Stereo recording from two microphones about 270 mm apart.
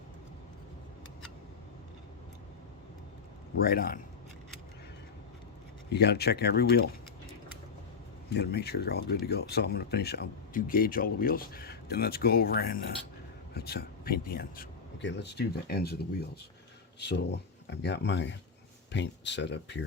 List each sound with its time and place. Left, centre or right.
3.6 s speech: left
5.9 s speech: left
8.3 s speech: left